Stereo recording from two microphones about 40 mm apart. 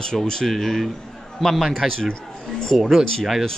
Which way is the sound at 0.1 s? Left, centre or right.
Centre.